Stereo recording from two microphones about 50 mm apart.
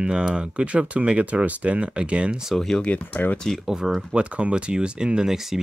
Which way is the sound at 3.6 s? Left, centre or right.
Centre.